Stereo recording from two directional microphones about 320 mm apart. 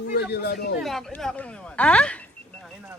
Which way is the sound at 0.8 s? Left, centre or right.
Centre.